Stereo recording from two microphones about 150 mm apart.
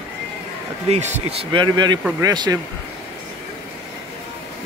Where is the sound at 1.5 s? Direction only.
30° right (ahead or behind).